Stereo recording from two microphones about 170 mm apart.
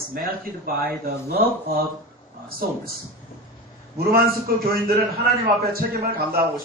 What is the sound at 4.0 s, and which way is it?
Speech, 60° right (ahead or behind).